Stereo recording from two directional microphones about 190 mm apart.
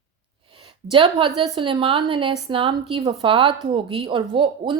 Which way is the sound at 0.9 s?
30° right (ahead or behind).